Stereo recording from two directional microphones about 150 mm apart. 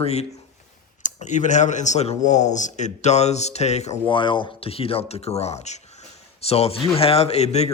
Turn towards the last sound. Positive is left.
turn(degrees=45)  # may be behind; listen again after turning